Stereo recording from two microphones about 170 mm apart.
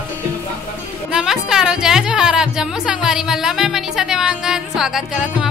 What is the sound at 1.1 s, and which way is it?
Speech, 5° right (ahead or behind).